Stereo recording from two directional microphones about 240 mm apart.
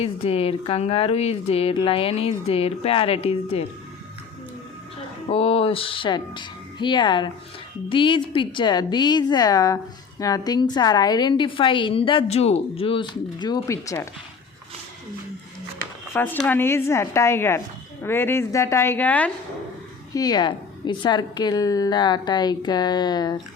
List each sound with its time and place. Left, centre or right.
0.0 s a woman's voice: left
5.3 s a woman's voice: left
16.1 s a woman's voice: centre
20.1 s a woman's voice: centre